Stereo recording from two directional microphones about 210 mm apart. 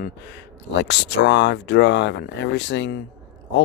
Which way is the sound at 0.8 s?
55° left (ahead or behind).